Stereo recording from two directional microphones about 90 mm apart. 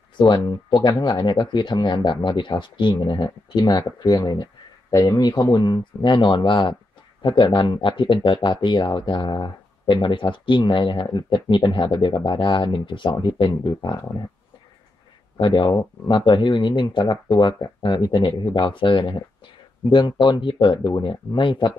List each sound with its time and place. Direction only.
0.3 s speech: 45° left (ahead or behind); by 11.1 s 65° left (ahead or behind)
11.4 s speech: 55° left (ahead or behind)
15.3 s speech: 60° left (ahead or behind)